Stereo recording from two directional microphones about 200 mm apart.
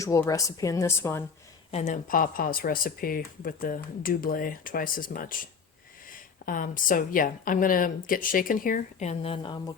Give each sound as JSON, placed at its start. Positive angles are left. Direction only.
{"t": 0.0, "sound": "speech", "side_deg": 15}
{"t": 1.7, "sound": "speech", "side_deg": 40}